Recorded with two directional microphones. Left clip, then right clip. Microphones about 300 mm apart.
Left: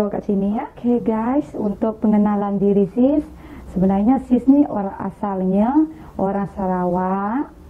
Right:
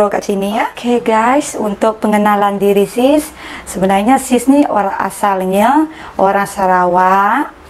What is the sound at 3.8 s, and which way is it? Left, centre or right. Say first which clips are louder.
A woman's voice: right 8 dB; centre.